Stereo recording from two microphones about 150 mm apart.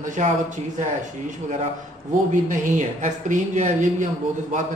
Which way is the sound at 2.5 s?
55° right (ahead or behind).